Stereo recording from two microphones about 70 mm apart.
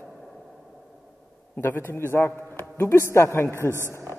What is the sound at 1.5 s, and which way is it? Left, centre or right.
Speech, left.